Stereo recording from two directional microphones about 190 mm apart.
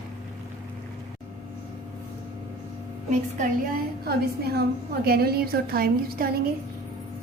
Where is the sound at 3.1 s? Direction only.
40° right (ahead or behind).